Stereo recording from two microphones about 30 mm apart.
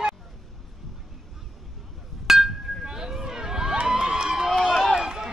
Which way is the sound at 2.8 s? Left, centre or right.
Right.